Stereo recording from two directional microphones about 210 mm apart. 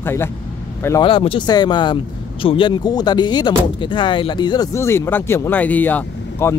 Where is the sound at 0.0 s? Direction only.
10° left (ahead or behind).